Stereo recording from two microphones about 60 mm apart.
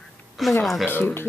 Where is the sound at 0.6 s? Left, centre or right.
Centre.